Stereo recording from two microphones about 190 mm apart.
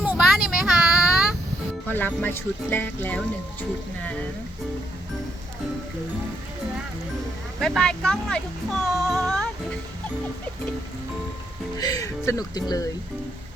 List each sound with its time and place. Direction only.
0.0 s child singing: 5° right (ahead or behind)
1.9 s speech: 10° left (ahead or behind)
7.6 s speech: 5° left (ahead or behind)
11.8 s speech: 20° left (ahead or behind)